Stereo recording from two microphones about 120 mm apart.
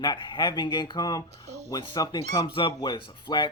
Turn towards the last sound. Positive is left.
turn(degrees=40)  # may be behind; listen again after turning